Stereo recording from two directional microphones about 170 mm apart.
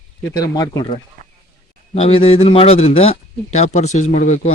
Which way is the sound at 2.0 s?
35° left (ahead or behind).